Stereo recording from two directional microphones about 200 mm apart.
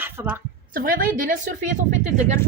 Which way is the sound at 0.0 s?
10° right (ahead or behind).